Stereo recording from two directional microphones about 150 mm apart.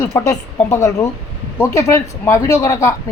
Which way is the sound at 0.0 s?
20° left (ahead or behind).